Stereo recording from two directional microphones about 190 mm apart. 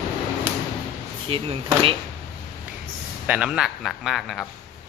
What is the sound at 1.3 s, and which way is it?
Speech, 30° right (ahead or behind).